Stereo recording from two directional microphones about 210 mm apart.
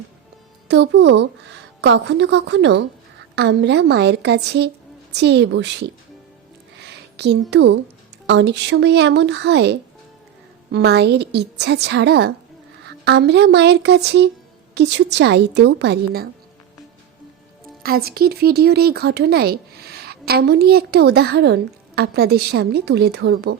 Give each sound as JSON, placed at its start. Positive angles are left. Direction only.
{"t": 0.7, "sound": "a woman's voice", "side_deg": -55}
{"t": 6.7, "sound": "a sound", "side_deg": -55}
{"t": 8.3, "sound": "a woman's voice", "side_deg": -55}
{"t": 17.8, "sound": "speech", "side_deg": -45}